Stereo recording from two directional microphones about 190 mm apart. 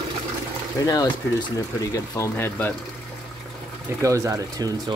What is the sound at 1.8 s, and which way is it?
Speech, 15° left (ahead or behind).